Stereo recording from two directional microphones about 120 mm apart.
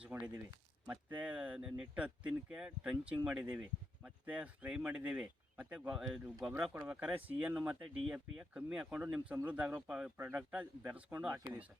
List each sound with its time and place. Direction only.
0.0 s a sound: 10° right (ahead or behind)
0.9 s speech: 10° right (ahead or behind)
6.9 s speech: 15° right (ahead or behind)
9.0 s speech: 15° right (ahead or behind)